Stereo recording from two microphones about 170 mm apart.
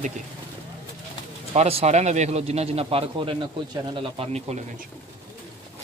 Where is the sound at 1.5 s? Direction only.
40° right (ahead or behind).